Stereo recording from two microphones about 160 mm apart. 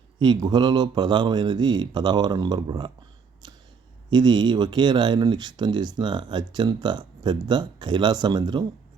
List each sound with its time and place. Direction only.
0.2 s speech: 25° right (ahead or behind)
4.1 s speech: 30° right (ahead or behind)